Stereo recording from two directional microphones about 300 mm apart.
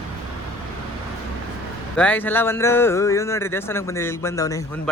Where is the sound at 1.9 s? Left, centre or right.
Centre.